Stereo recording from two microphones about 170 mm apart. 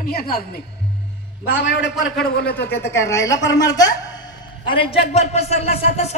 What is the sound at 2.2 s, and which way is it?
Speech, 65° left (ahead or behind).